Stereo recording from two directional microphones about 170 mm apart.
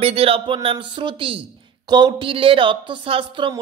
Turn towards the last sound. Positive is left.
turn(degrees=-30)  # may be behind; listen again after turning